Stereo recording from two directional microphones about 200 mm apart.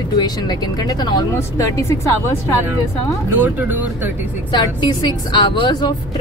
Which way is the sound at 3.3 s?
10° right (ahead or behind).